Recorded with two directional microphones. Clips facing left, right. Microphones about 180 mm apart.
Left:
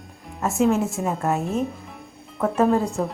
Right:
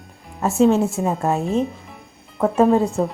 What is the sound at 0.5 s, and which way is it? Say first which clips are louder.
Speech: right 5 dB; 30° right (ahead or behind).